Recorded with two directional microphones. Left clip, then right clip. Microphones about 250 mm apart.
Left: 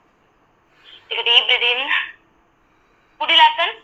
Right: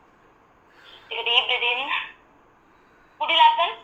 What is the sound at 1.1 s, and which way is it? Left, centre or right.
Telephone, left.